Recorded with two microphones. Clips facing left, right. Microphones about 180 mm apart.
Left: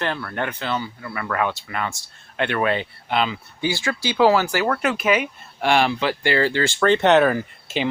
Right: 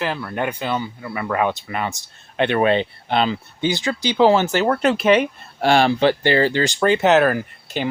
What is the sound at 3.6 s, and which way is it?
Speech, 20° right (ahead or behind).